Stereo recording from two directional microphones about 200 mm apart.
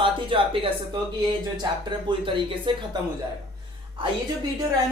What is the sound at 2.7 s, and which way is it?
Speech, 25° right (ahead or behind).